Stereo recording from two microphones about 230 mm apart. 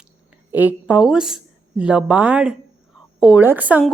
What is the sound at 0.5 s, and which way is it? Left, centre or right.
A woman's voice, centre.